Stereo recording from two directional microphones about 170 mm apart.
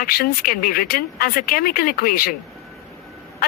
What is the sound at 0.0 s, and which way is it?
Speech, 60° left (ahead or behind).